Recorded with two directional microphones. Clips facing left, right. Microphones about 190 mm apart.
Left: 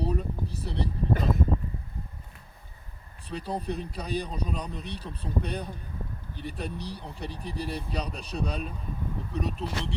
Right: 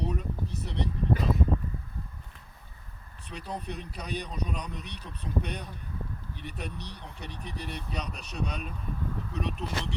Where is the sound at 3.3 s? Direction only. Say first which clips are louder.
Left 5 dB; 35° left (ahead or behind).